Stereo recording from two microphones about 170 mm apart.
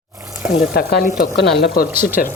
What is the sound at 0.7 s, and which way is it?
Speech, 65° left (ahead or behind).